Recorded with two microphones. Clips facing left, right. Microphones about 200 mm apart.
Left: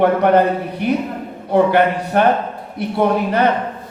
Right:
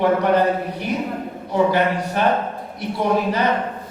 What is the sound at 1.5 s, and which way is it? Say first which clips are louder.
Speech: left 4 dB; 55° left (ahead or behind).